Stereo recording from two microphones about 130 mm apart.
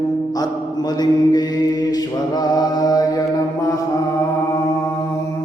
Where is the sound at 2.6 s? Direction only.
30° left (ahead or behind).